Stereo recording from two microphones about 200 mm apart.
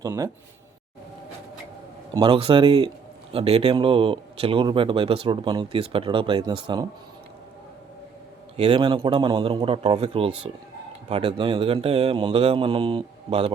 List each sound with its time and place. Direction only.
0.0 s speech: 15° right (ahead or behind)
2.1 s speech: 25° right (ahead or behind)
8.5 s speech: 30° right (ahead or behind)